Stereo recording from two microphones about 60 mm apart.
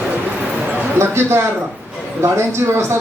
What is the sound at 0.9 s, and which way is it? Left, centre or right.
Speech, right.